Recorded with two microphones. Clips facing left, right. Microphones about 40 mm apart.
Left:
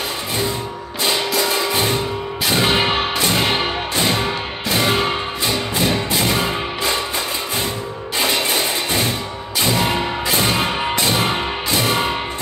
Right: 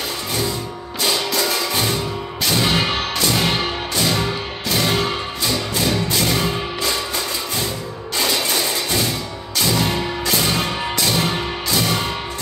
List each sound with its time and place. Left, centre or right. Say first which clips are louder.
1.3 s music: left 2 dB; centre
8.2 s a sound: left 1 dB; left
9.6 s music: left 1 dB; left